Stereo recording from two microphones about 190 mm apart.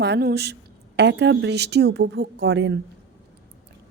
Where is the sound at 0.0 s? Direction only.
60° right (ahead or behind).